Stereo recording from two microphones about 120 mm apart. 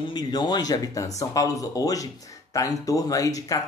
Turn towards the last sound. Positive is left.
turn(degrees=30)  # may be behind; listen again after turning